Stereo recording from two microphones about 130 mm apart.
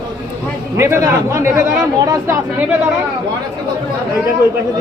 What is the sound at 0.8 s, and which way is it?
Speech, 20° right (ahead or behind).